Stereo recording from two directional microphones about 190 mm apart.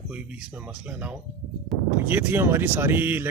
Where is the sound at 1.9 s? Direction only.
10° right (ahead or behind).